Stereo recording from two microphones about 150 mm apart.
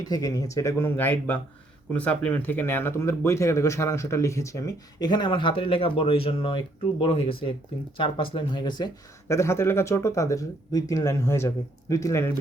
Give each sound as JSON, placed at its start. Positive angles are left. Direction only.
{"t": 0.0, "sound": "speech", "side_deg": 25}
{"t": 9.3, "sound": "speech", "side_deg": 15}